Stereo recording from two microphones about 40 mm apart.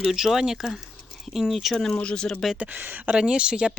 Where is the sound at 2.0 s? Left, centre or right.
Left.